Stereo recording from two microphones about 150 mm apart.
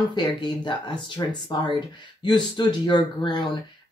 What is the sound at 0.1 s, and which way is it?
Speech, 30° left (ahead or behind).